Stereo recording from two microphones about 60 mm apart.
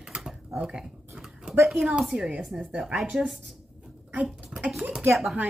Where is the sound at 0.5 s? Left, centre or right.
Centre.